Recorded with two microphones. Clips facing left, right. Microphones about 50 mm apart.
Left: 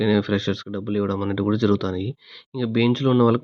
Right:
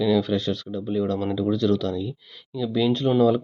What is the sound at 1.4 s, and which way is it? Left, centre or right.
Speech, left.